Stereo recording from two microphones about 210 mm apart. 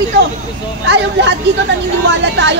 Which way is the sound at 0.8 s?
55° right (ahead or behind).